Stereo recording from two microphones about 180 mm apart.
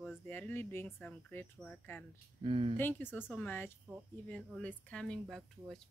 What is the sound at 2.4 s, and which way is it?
Speech, 30° right (ahead or behind).